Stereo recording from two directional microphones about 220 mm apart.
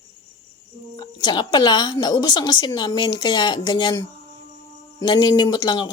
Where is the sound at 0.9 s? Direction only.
20° left (ahead or behind).